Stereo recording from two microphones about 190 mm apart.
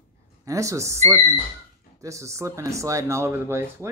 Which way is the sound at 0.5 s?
15° right (ahead or behind).